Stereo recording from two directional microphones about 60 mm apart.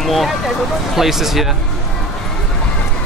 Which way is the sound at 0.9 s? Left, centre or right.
Centre.